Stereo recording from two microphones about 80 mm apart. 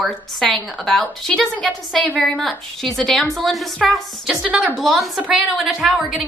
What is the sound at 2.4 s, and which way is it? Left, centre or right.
A woman's voice, centre.